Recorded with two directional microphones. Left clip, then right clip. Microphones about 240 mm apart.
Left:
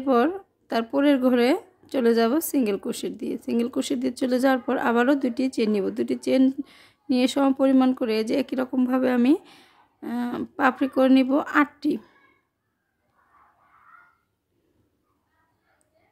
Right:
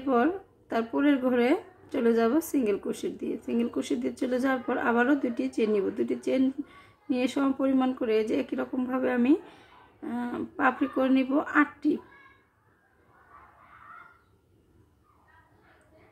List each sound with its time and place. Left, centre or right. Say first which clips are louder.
0.0 s speech: left 4 dB; left